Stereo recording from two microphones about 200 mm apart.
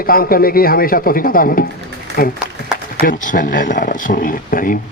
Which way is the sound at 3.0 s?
45° left (ahead or behind).